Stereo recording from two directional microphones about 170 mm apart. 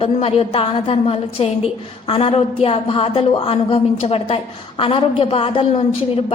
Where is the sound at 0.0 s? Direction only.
35° left (ahead or behind).